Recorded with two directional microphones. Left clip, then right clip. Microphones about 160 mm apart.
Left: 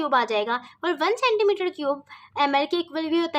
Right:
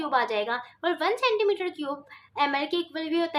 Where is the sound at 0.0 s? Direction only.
35° left (ahead or behind).